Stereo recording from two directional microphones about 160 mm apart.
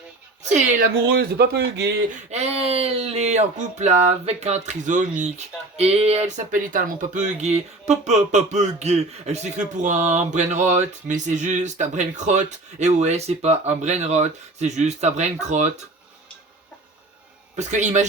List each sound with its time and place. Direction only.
0.4 s speech: 45° right (ahead or behind)
1.0 s speech: 90° right
2.3 s speech: 40° right (ahead or behind)
5.7 s speech: 40° right (ahead or behind)
17.6 s speech: 45° right (ahead or behind)